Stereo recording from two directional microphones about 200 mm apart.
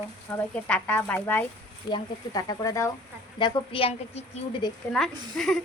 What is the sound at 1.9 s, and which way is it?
A woman's voice, 20° left (ahead or behind).